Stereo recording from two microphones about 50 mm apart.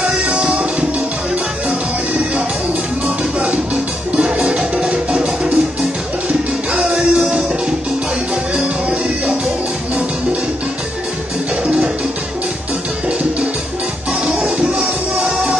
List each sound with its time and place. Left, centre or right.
0.0 s music: right
3.3 s music: centre
11.6 s music: centre
14.2 s music: centre